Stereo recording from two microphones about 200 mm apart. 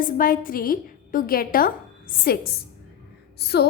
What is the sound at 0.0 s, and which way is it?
A woman's voice, 45° left (ahead or behind).